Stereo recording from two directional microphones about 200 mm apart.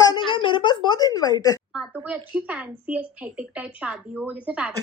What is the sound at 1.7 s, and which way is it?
A woman's voice, 5° right (ahead or behind).